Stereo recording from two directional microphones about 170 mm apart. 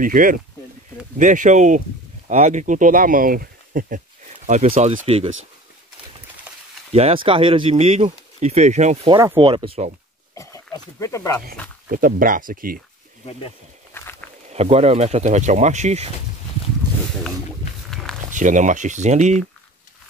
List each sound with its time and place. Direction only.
0.0 s speech: 55° right (ahead or behind)
4.5 s speech: 40° right (ahead or behind)
6.9 s speech: 35° right (ahead or behind)
9.1 s speech: 20° right (ahead or behind)
9.5 s speech: 30° right (ahead or behind)
10.3 s speech: 20° left (ahead or behind)
11.9 s speech: 55° right (ahead or behind)
13.9 s walk: 15° left (ahead or behind)
14.5 s speech: 40° right (ahead or behind)
17.8 s walk: centre (ahead or behind)
18.3 s speech: 50° right (ahead or behind)